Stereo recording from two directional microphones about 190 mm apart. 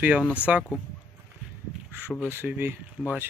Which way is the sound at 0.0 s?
5° right (ahead or behind).